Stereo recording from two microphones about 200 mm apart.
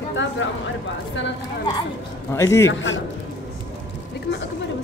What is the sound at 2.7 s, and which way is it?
Speech, 70° left (ahead or behind).